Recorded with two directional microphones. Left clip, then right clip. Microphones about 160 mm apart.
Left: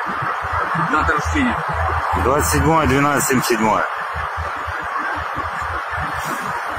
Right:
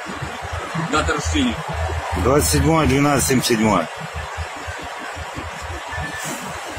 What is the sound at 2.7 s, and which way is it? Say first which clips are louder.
Speech: left 1 dB; 75° right (ahead or behind).